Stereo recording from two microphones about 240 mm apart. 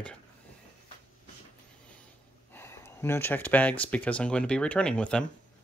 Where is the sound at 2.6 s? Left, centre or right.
Centre.